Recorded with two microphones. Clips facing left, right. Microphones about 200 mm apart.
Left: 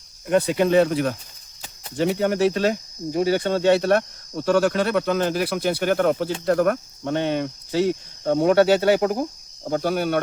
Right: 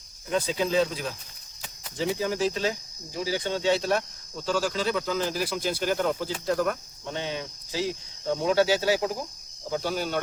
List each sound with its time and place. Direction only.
0.3 s speech: 65° left (ahead or behind)